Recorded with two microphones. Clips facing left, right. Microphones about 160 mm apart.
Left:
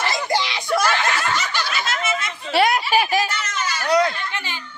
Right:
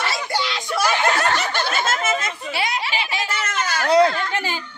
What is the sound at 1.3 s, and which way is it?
Snicker, 55° right (ahead or behind).